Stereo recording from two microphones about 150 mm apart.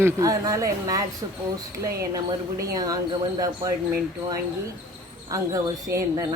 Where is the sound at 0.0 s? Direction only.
20° right (ahead or behind).